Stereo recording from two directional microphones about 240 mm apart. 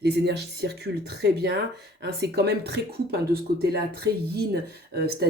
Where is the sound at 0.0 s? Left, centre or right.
Right.